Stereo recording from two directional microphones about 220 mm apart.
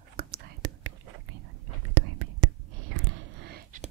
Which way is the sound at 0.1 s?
45° right (ahead or behind).